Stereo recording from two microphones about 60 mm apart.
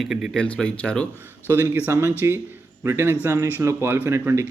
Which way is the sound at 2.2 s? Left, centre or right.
Right.